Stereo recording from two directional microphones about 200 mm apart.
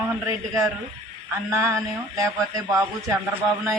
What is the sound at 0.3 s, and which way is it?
Speech, 15° right (ahead or behind).